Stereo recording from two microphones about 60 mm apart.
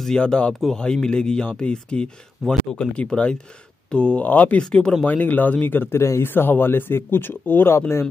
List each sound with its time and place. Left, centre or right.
0.0 s speech: centre; by 4.6 s left
4.6 s speech: centre
5.0 s a man's voice: left